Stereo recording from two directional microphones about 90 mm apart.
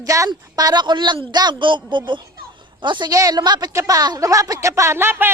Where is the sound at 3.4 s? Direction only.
50° right (ahead or behind).